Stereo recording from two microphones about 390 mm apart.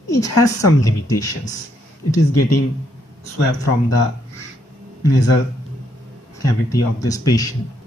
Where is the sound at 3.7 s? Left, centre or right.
Left.